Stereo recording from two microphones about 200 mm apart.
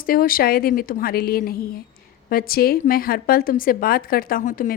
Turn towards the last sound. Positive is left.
turn(degrees=40)  # may be behind; listen again after turning